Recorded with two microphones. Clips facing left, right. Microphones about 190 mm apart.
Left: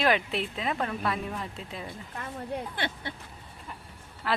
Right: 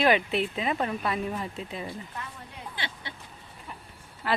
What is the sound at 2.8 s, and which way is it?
Speech, 55° left (ahead or behind).